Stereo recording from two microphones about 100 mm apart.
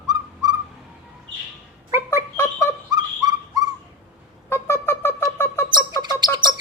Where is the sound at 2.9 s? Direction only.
40° right (ahead or behind).